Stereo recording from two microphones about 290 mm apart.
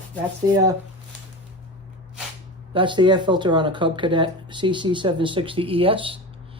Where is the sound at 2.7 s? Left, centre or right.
Centre.